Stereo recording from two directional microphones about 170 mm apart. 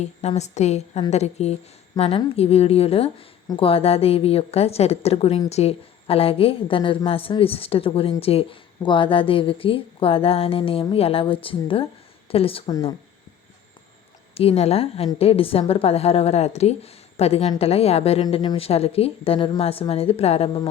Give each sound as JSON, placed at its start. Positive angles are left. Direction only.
{"t": 0.0, "sound": "a woman's voice", "side_deg": 40}
{"t": 14.3, "sound": "a woman's voice", "side_deg": 35}